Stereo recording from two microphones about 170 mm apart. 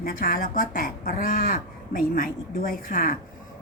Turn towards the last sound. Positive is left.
turn(degrees=55)  # may be behind; listen again after turning